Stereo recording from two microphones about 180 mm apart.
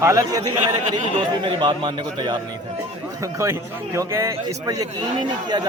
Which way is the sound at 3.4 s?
15° right (ahead or behind).